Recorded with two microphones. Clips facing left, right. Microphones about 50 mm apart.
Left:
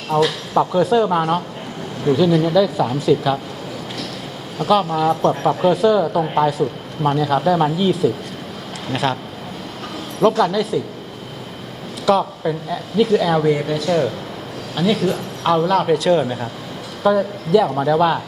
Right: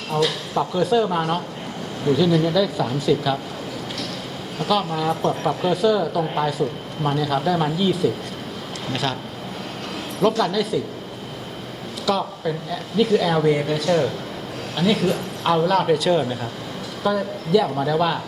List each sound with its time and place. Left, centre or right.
0.1 s speech: centre
0.6 s speech: centre
4.7 s speech: centre
5.2 s speech: left
5.7 s speech: centre
10.2 s speech: centre
12.0 s a man's voice: centre